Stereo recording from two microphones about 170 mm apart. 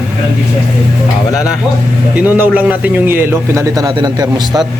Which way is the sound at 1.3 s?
5° right (ahead or behind).